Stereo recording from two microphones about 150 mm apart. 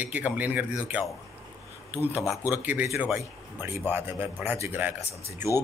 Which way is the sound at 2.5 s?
10° right (ahead or behind).